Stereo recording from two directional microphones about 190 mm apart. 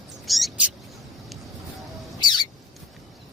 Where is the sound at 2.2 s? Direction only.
20° left (ahead or behind).